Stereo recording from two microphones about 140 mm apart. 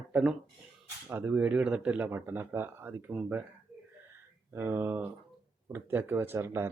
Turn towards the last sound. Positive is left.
turn(degrees=-20)  # may be behind; listen again after turning